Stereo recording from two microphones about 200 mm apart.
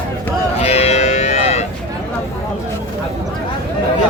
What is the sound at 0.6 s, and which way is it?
Moo, 30° left (ahead or behind).